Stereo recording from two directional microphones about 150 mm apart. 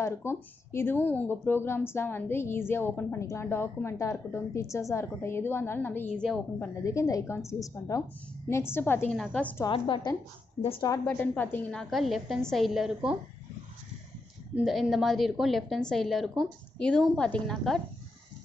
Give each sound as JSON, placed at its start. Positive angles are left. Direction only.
{"t": 0.0, "sound": "a woman's voice", "side_deg": 15}
{"t": 9.7, "sound": "a woman's voice", "side_deg": 35}
{"t": 11.1, "sound": "a woman's voice", "side_deg": 15}
{"t": 14.5, "sound": "a woman's voice", "side_deg": 0}